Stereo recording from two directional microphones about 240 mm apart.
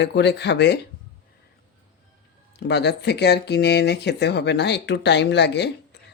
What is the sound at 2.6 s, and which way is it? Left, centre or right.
Speech, left.